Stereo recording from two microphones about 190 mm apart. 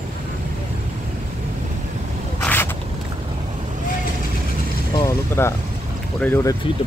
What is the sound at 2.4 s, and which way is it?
Zipper, 10° left (ahead or behind).